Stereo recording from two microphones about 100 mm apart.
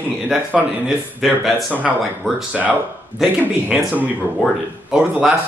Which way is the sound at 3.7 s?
15° right (ahead or behind).